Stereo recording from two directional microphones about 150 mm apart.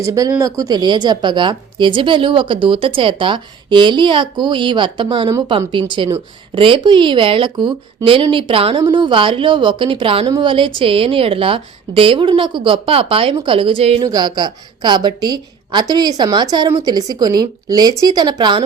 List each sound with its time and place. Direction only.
0.0 s a woman's voice: 20° right (ahead or behind); by 14.0 s 40° right (ahead or behind)
14.0 s a woman's voice: 25° right (ahead or behind)